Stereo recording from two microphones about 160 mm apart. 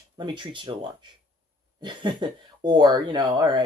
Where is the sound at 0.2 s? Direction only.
30° right (ahead or behind).